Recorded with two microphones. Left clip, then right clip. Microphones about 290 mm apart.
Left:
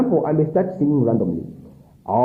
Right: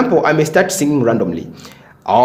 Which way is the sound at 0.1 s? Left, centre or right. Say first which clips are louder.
Right 6 dB; right.